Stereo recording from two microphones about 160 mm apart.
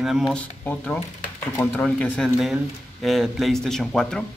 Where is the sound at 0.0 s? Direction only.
Centre (ahead or behind).